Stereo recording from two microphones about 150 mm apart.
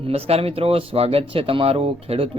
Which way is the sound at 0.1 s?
40° right (ahead or behind).